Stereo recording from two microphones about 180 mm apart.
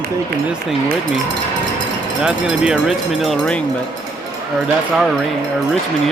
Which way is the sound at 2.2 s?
5° right (ahead or behind).